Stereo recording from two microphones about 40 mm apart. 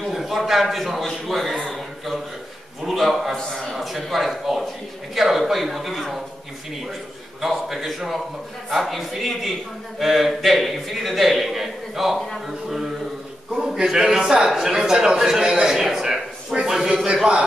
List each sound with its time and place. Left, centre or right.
0.1 s a man's voice: centre
2.8 s a man's voice: centre
7.4 s a man's voice: centre
12.4 s mantra: centre
13.6 s a sound: centre
13.8 s a man's voice: centre